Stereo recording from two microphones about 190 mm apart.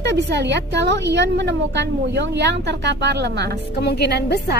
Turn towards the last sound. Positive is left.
turn(degrees=60)  # may be behind; listen again after turning